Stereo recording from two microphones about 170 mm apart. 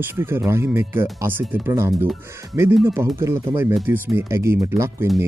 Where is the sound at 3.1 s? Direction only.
15° right (ahead or behind).